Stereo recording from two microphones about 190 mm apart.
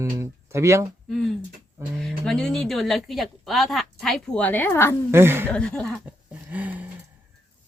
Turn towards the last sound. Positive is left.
turn(degrees=-10)  # may be behind; listen again after turning